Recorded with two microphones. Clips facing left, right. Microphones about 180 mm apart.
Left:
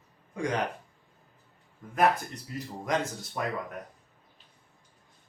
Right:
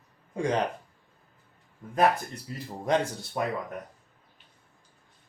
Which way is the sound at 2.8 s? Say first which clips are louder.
Right 4 dB; 30° right (ahead or behind).